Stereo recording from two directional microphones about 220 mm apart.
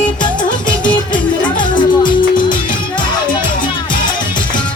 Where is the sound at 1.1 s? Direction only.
20° left (ahead or behind).